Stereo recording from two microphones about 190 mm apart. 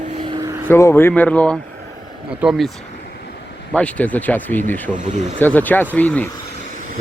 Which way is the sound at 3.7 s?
5° left (ahead or behind).